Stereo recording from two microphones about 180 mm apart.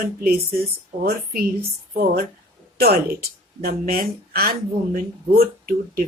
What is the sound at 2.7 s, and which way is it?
Speech, 60° right (ahead or behind).